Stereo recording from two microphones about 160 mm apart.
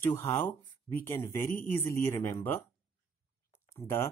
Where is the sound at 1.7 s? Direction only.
15° left (ahead or behind).